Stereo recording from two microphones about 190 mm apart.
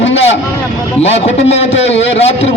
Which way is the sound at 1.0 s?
35° left (ahead or behind).